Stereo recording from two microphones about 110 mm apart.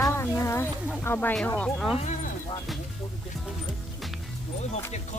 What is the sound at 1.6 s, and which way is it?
Speech, 5° left (ahead or behind).